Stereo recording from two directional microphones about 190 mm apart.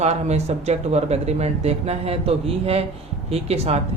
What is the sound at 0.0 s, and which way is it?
Speech, 35° right (ahead or behind).